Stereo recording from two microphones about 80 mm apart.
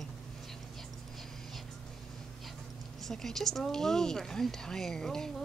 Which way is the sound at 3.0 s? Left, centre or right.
Centre.